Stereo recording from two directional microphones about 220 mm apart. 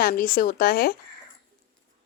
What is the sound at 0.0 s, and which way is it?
Speech, 40° left (ahead or behind).